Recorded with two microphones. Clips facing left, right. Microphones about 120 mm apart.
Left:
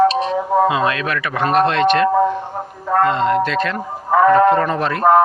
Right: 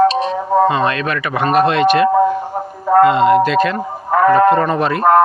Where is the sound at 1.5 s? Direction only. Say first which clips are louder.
Right 2 dB; 5° right (ahead or behind).